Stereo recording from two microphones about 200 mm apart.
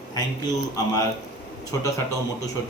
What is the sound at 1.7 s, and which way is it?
Speech, 15° left (ahead or behind).